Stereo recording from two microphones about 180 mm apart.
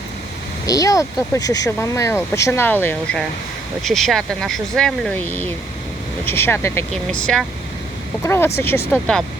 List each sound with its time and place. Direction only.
0.7 s speech: 20° left (ahead or behind)
8.9 s speech: centre (ahead or behind)